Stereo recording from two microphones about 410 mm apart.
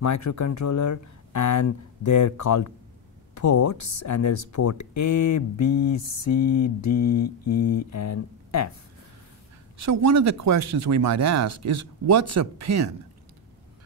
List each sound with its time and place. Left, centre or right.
0.0 s speech: left
9.8 s speech: right